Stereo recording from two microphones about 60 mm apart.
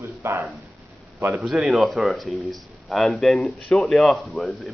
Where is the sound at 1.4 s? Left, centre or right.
Centre.